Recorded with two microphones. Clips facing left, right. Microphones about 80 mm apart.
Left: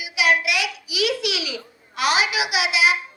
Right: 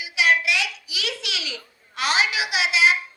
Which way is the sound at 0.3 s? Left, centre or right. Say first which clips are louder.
Left 1 dB; right.